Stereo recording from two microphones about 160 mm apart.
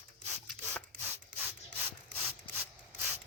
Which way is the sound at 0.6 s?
15° right (ahead or behind).